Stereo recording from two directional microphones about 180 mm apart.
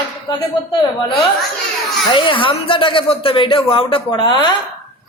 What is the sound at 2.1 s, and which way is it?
Speech, 30° left (ahead or behind).